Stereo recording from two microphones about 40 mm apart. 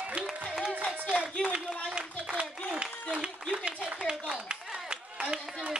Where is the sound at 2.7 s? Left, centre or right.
Right.